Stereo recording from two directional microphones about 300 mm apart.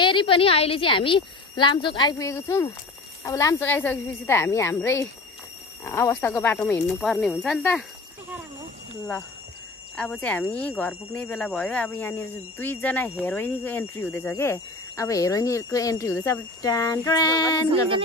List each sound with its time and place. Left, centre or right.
0.0 s speech: centre
9.9 s speech: centre